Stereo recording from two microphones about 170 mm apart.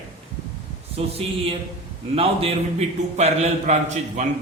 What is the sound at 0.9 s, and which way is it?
A man's voice, 35° right (ahead or behind).